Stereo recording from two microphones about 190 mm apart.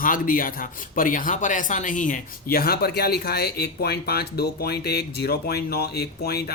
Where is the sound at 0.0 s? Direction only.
45° left (ahead or behind).